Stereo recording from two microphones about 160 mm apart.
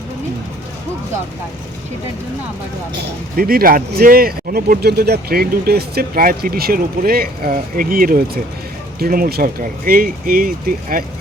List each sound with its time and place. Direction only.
3.3 s speech: 65° right (ahead or behind)